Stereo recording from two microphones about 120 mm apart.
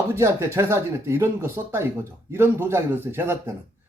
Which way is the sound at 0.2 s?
25° right (ahead or behind).